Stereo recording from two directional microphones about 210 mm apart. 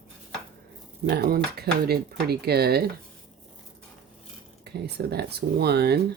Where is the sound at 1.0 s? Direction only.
50° right (ahead or behind).